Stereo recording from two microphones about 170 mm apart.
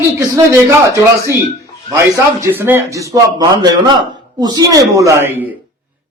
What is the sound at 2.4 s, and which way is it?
Speech, 10° right (ahead or behind).